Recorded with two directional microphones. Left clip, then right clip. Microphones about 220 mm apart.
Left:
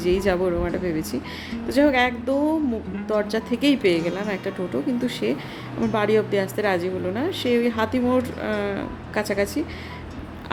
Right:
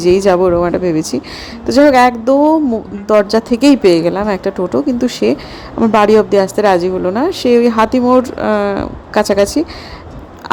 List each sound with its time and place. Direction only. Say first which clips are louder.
0.0 s a woman's voice: right 12 dB; 30° right (ahead or behind)